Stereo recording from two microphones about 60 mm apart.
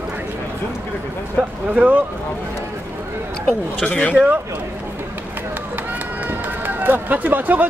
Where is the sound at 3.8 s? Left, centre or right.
Left.